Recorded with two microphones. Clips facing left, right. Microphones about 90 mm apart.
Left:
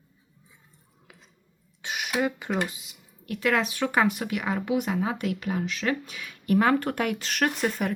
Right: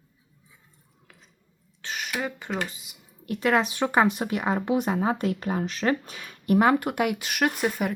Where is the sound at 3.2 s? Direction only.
25° right (ahead or behind).